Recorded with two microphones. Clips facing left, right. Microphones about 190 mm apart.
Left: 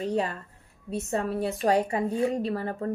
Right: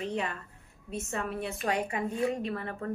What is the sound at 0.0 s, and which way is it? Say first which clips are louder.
A woman's voice: left 5 dB; 35° left (ahead or behind).